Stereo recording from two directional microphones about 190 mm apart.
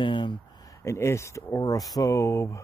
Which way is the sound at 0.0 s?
25° left (ahead or behind).